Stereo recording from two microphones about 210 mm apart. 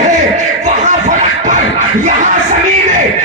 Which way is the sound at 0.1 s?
35° right (ahead or behind).